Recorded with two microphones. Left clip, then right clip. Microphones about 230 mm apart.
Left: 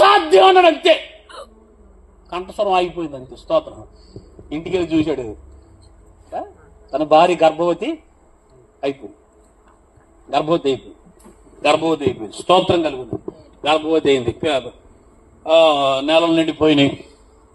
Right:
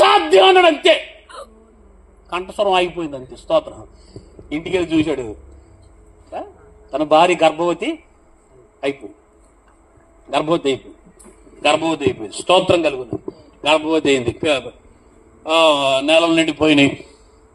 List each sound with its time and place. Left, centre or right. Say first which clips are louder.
0.0 s a sound: even; right
1.2 s hiccup: right 1 dB; centre
2.3 s a woman's voice: right 1 dB; right
10.3 s a woman's voice: even; right